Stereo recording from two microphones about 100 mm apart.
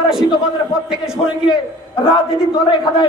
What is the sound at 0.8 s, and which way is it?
Speech, 5° right (ahead or behind).